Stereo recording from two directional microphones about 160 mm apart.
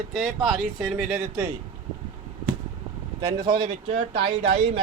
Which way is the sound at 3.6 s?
45° right (ahead or behind).